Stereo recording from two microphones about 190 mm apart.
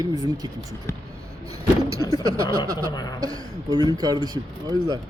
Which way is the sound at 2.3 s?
15° right (ahead or behind).